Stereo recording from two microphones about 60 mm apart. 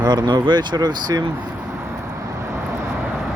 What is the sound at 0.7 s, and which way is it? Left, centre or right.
Speech, right.